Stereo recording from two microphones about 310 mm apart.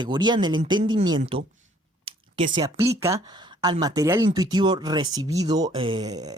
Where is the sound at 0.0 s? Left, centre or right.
Centre.